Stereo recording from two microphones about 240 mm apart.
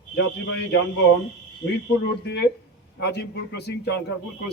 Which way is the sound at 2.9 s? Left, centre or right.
Left.